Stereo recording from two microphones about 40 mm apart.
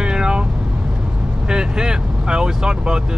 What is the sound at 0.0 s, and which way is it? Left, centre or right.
Vehicle, right.